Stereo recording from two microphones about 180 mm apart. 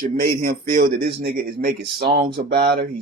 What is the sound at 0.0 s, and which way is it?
Speech, 55° right (ahead or behind).